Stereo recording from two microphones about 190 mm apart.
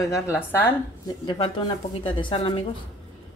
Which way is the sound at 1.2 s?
20° left (ahead or behind).